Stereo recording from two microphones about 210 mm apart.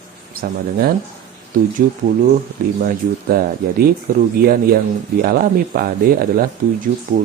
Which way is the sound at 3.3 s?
45° right (ahead or behind).